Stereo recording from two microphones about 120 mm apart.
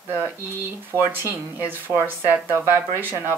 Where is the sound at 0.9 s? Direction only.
20° right (ahead or behind).